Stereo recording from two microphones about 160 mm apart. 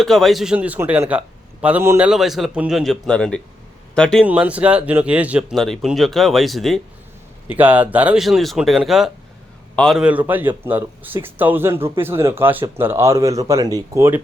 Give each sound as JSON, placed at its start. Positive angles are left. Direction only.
{"t": 0.0, "sound": "a man's voice", "side_deg": 0}
{"t": 2.0, "sound": "speech", "side_deg": 0}
{"t": 4.3, "sound": "speech", "side_deg": -10}
{"t": 7.5, "sound": "a man's voice", "side_deg": -10}